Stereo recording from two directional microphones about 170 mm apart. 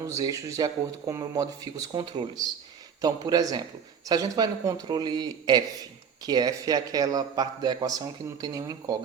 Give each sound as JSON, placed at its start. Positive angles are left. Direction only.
{"t": 0.0, "sound": "a man's voice", "side_deg": -20}